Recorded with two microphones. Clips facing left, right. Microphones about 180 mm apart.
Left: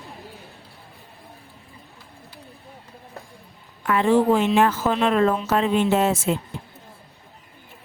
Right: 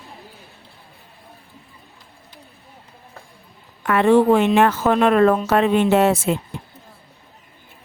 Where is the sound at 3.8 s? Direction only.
65° right (ahead or behind).